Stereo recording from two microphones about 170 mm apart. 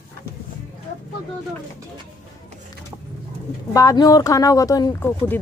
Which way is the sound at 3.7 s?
20° left (ahead or behind).